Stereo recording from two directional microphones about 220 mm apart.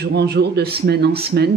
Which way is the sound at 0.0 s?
50° right (ahead or behind).